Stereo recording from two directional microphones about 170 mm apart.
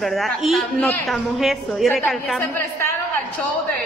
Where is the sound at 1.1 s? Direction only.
Centre (ahead or behind).